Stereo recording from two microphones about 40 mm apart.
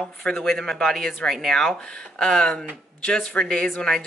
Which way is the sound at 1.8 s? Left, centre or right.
Centre.